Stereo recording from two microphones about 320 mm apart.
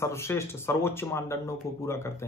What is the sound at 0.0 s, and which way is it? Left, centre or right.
Speech, centre.